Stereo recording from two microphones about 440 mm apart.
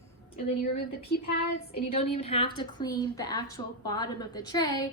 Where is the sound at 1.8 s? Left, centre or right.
Centre.